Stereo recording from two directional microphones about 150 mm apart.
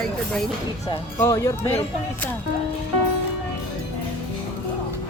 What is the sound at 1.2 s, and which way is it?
Speech, 20° left (ahead or behind).